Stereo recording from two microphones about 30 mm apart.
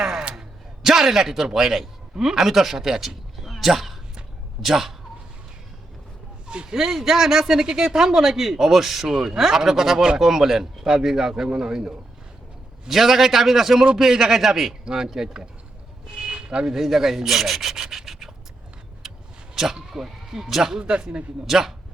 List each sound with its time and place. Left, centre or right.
0.8 s a man's voice: centre
3.4 s a sound: centre
4.6 s speech: centre
6.7 s speech: centre
7.6 s speech: right
12.9 s speech: centre
14.8 s speech: right
16.1 s vehicle: right
16.8 s speech: centre
17.7 s rub: centre
19.0 s vehicle: centre
19.5 s speech: centre
20.9 s a man's voice: right
21.4 s speech: centre